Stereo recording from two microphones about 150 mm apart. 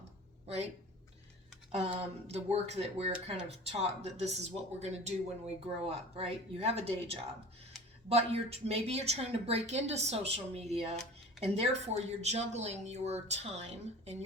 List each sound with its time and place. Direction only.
0.4 s speech: 45° right (ahead or behind)
1.7 s speech: 45° right (ahead or behind)
6.1 s speech: 45° right (ahead or behind)